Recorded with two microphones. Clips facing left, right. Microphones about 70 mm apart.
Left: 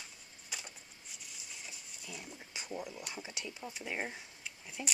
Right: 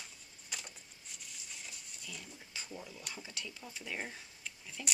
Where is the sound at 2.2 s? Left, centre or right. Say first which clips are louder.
Left 2 dB; left.